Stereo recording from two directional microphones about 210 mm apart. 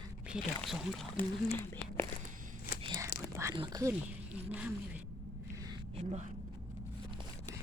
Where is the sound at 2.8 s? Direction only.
20° right (ahead or behind).